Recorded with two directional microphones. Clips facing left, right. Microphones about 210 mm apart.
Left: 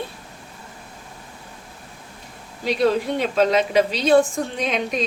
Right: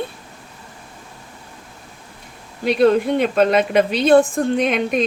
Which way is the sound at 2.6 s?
55° right (ahead or behind).